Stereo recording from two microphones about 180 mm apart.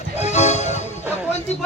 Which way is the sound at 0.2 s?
40° left (ahead or behind).